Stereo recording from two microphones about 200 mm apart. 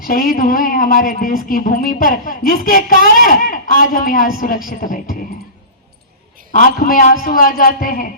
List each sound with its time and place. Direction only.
0.0 s speech: 45° left (ahead or behind)
6.5 s speech: 45° left (ahead or behind)